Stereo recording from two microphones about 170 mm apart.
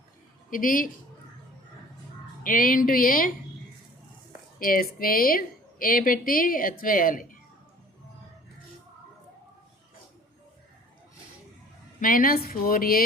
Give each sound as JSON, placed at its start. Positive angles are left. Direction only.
{"t": 0.5, "sound": "a woman's voice", "side_deg": 55}
{"t": 2.4, "sound": "a woman's voice", "side_deg": 55}
{"t": 4.6, "sound": "a woman's voice", "side_deg": 55}
{"t": 11.9, "sound": "a woman's voice", "side_deg": 55}